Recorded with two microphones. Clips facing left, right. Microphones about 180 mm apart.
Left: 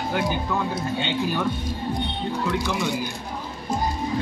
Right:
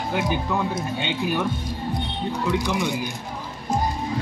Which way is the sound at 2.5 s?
15° right (ahead or behind).